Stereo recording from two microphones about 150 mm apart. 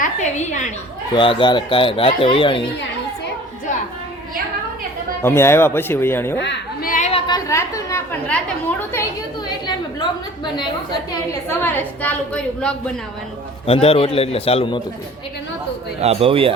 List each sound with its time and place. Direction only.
0.0 s a woman's voice: 55° left (ahead or behind)
1.1 s speech: 35° left (ahead or behind)
5.2 s a woman's voice: 15° left (ahead or behind)
6.8 s a sound: 60° left (ahead or behind)
7.1 s a sound: 25° left (ahead or behind)
9.6 s a sound: 30° left (ahead or behind)
11.4 s a woman's voice: 15° left (ahead or behind)
13.7 s speech: 40° left (ahead or behind)
16.0 s speech: 40° right (ahead or behind)